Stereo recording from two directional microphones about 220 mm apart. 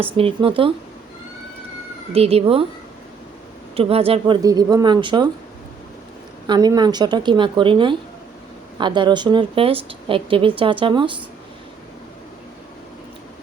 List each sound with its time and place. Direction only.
0.0 s speech: 25° right (ahead or behind)
2.1 s speech: 25° right (ahead or behind)
3.8 s speech: 25° right (ahead or behind)
6.5 s speech: 20° right (ahead or behind)